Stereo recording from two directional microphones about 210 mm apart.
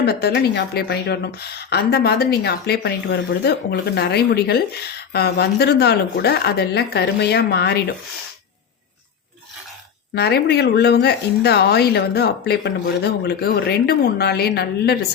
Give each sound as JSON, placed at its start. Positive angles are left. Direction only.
{"t": 0.0, "sound": "speech", "side_deg": 50}
{"t": 10.2, "sound": "speech", "side_deg": 50}